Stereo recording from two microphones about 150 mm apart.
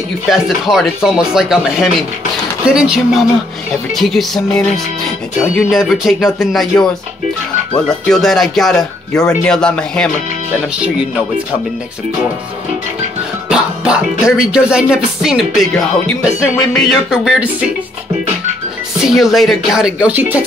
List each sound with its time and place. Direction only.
0.3 s speech: centre (ahead or behind)
8.1 s speech: centre (ahead or behind)
13.5 s speech: 5° right (ahead or behind)
19.0 s speech: centre (ahead or behind)